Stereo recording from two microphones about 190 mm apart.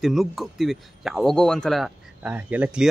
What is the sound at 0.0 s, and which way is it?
Speech, centre (ahead or behind).